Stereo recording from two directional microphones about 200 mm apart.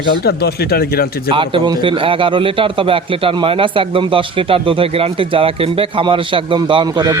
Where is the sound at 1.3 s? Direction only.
25° right (ahead or behind).